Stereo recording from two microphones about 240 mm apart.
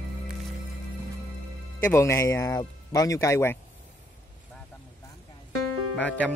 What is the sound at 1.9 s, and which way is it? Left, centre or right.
Speech, centre.